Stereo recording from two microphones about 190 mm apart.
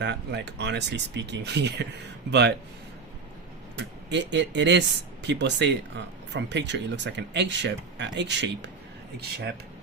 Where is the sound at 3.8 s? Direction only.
65° right (ahead or behind).